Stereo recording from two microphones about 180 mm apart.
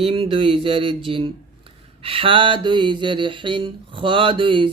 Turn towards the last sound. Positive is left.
turn(degrees=-30)  # may be behind; listen again after turning